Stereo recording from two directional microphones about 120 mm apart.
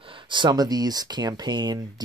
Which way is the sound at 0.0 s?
45° right (ahead or behind).